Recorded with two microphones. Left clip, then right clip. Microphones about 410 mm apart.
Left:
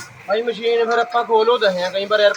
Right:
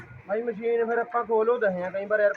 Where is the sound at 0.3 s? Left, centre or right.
Right.